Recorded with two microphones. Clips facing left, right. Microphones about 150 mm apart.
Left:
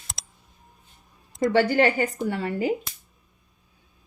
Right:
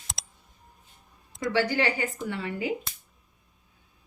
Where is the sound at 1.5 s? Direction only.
50° left (ahead or behind).